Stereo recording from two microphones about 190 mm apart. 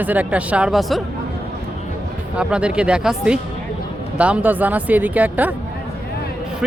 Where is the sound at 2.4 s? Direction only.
5° right (ahead or behind).